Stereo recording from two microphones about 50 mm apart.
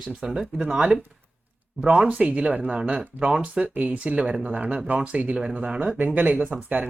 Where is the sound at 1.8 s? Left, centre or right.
Right.